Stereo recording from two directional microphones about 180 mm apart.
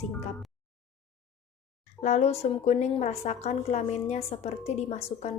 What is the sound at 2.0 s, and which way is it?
A woman's voice, 40° left (ahead or behind).